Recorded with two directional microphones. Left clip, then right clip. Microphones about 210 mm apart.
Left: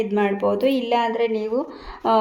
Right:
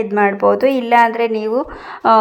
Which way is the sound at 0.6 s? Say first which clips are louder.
Right 6 dB; 50° right (ahead or behind).